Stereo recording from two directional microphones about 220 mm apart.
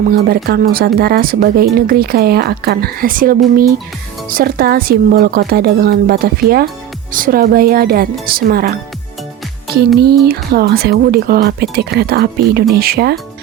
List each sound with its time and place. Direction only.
0.1 s speech: 45° right (ahead or behind)
10.0 s speech: 45° right (ahead or behind)